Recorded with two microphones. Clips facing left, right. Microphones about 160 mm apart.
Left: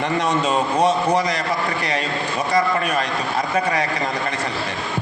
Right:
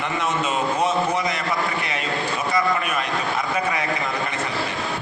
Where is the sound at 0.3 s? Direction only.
35° left (ahead or behind).